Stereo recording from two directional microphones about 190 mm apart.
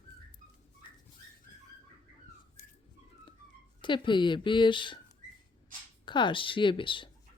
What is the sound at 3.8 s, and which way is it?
Speech, 25° left (ahead or behind).